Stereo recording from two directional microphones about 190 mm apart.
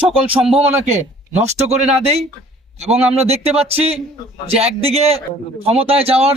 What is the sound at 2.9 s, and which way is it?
Speech, 35° right (ahead or behind).